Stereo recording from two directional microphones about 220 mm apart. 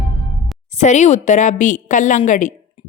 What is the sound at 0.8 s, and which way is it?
Speech, 30° left (ahead or behind).